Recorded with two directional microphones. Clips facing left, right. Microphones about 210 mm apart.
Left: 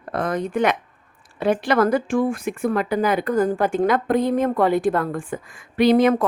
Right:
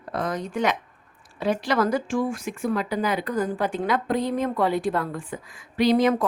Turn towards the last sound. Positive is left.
turn(degrees=55)  # may be behind; listen again after turning